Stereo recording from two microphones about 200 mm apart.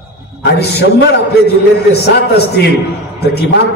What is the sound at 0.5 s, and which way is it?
A man's voice, 55° left (ahead or behind).